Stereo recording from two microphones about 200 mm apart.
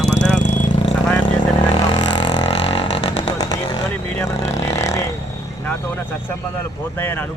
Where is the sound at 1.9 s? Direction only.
20° left (ahead or behind).